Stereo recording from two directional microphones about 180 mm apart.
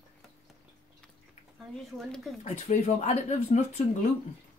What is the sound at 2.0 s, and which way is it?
Speech, centre (ahead or behind).